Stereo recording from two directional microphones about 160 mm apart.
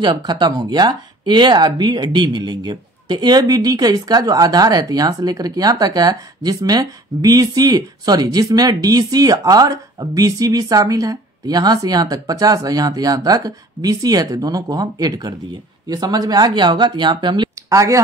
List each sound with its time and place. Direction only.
0.0 s speech: 25° right (ahead or behind)